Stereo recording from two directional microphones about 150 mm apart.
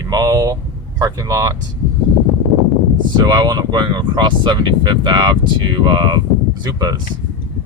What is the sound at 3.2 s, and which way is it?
Speech, 25° right (ahead or behind).